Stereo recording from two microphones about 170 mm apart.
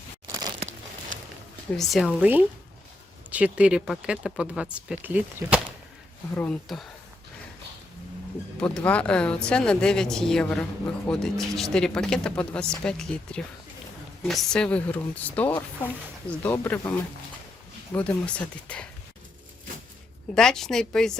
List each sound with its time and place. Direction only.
0.3 s crunch: 20° right (ahead or behind)
1.7 s speech: centre (ahead or behind)
6.3 s speech: 5° left (ahead or behind)
8.6 s speech: 5° left (ahead or behind)
17.9 s speech: 5° left (ahead or behind)
20.3 s speech: 5° left (ahead or behind)